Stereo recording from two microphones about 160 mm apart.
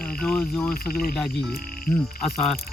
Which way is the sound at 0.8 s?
70° left (ahead or behind).